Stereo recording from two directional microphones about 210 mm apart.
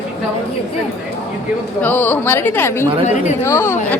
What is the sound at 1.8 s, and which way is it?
A woman's voice, 10° left (ahead or behind).